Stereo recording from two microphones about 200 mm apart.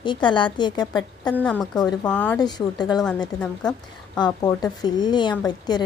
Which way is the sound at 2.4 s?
20° left (ahead or behind).